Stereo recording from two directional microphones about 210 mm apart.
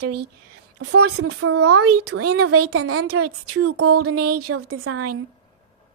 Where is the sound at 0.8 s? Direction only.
90° right.